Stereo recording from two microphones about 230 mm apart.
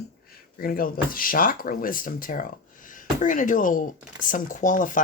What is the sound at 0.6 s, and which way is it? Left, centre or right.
Speech, left.